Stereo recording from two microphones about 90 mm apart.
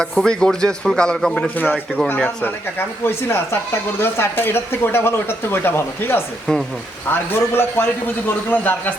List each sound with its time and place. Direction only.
0.3 s a man's voice: 10° left (ahead or behind); by 6.2 s 25° left (ahead or behind)
6.5 s a man's voice: 5° left (ahead or behind)
7.1 s speech: 25° left (ahead or behind)